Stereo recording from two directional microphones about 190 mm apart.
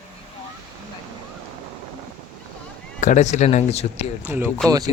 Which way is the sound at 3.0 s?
40° left (ahead or behind).